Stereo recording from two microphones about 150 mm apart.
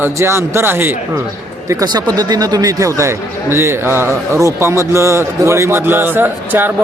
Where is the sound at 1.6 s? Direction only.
25° right (ahead or behind).